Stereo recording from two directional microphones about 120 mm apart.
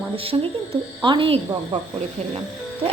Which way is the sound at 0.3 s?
35° right (ahead or behind).